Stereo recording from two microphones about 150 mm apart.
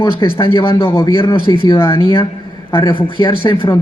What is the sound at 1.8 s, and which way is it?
Speech, 35° left (ahead or behind).